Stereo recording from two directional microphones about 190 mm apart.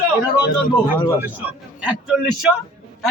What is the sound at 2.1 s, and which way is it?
Speech, 5° right (ahead or behind).